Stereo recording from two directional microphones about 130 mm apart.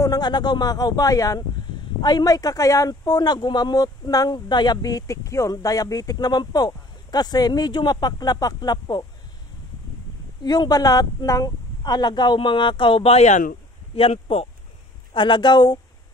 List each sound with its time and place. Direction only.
0.0 s speech: 30° left (ahead or behind)
10.4 s speech: 30° left (ahead or behind); by 13.6 s 80° left
13.9 s speech: 50° left (ahead or behind)
15.1 s speech: 40° left (ahead or behind)